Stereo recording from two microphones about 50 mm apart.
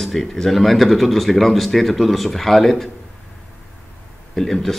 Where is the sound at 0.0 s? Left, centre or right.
Centre.